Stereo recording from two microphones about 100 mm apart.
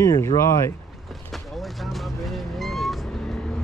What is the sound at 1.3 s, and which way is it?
Vehicle, centre (ahead or behind).